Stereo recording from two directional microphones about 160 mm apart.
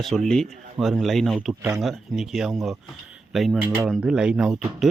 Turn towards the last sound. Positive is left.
turn(degrees=-5)  # may be behind; listen again after turning